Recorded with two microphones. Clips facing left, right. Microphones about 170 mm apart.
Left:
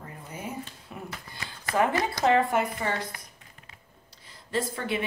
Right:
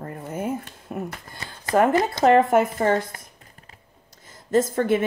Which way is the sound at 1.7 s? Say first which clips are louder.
Right 6 dB; 40° right (ahead or behind).